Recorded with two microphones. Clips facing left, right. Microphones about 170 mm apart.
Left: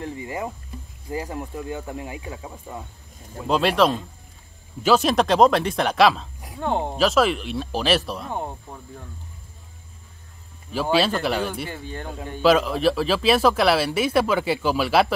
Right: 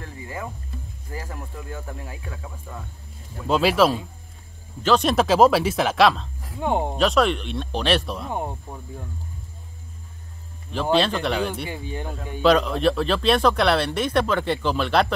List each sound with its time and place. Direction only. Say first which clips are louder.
0.0 s music: left 5 dB; 20° left (ahead or behind)
1.1 s speech: left 6 dB; 20° left (ahead or behind)
3.4 s speech: right 1 dB; centre (ahead or behind)
6.6 s speech: right 1 dB; 10° right (ahead or behind)
7.0 s speech: left 2 dB; centre (ahead or behind)
8.3 s speech: right 1 dB; 10° right (ahead or behind)
10.7 s speech: even; 5° left (ahead or behind)
11.7 s speech: right 2 dB; 15° right (ahead or behind)
12.4 s speech: even; 5° left (ahead or behind)